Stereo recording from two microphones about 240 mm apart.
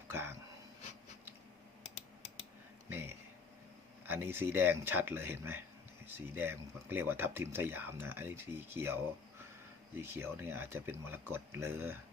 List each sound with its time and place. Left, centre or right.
0.1 s dog: centre
1.8 s typing: left
2.9 s a sound: centre
4.0 s speech: centre